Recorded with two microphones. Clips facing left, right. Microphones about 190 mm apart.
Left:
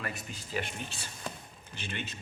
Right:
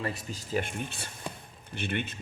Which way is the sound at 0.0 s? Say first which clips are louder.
Right 5 dB; 35° right (ahead or behind).